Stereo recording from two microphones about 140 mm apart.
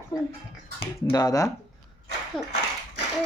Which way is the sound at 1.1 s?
25° left (ahead or behind).